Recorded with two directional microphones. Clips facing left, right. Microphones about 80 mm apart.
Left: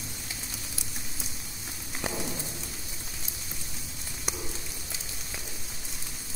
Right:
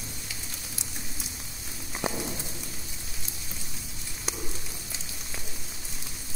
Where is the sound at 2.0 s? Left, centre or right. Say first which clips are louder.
Right 3 dB; centre.